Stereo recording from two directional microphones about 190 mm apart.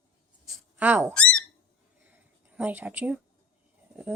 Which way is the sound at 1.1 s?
5° left (ahead or behind).